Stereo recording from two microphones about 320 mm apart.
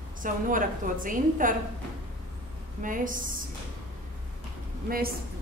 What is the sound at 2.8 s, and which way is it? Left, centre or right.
Speech, right.